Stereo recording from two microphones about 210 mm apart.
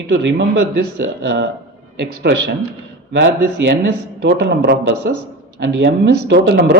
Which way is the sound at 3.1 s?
55° right (ahead or behind).